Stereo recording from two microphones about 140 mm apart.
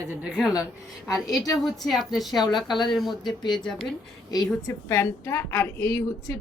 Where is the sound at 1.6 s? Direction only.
Centre (ahead or behind).